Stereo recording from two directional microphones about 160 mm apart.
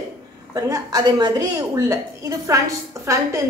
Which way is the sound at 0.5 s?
25° right (ahead or behind).